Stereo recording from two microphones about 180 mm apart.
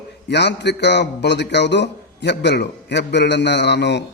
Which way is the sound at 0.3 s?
70° left (ahead or behind).